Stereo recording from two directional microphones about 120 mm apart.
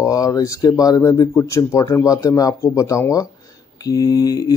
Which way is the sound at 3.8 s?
30° left (ahead or behind).